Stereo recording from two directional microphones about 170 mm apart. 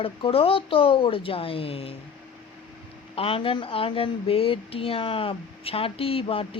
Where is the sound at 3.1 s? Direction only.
30° left (ahead or behind).